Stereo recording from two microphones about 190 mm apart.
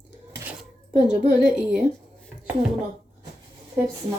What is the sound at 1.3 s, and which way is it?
Speech, 5° right (ahead or behind).